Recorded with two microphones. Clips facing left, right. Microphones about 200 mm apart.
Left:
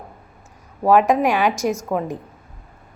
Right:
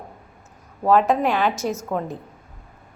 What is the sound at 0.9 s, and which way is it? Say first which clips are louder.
A woman's voice: left 2 dB; 15° left (ahead or behind).